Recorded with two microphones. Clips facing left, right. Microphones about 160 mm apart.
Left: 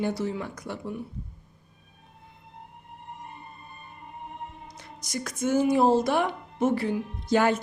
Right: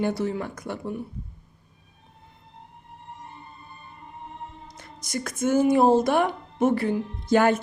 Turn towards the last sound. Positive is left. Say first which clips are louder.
# right 3 dB
turn(degrees=-55)  # may be behind; listen again after turning